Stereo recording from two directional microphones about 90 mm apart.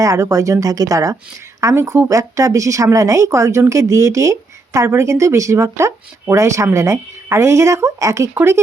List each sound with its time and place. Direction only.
0.0 s a woman's voice: 35° right (ahead or behind)